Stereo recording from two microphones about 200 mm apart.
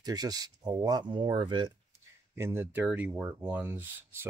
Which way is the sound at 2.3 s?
10° right (ahead or behind).